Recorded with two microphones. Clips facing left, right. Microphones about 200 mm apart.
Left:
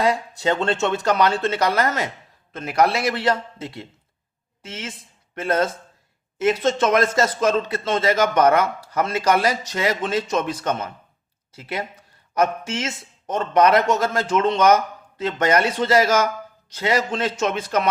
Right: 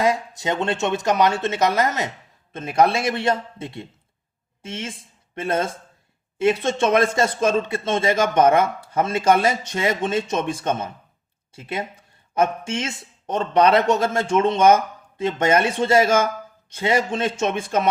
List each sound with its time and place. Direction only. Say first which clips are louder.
0.0 s a woman's voice: left 1 dB; 20° right (ahead or behind)